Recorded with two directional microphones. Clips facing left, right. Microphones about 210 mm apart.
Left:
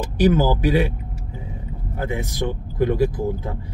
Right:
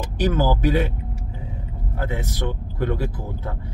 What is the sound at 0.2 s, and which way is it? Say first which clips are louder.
Speech: left 3 dB; 15° left (ahead or behind).